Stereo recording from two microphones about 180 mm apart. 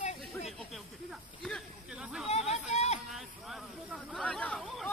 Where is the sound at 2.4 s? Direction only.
40° left (ahead or behind).